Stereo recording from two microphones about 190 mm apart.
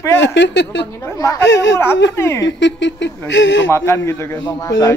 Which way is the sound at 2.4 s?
70° left (ahead or behind).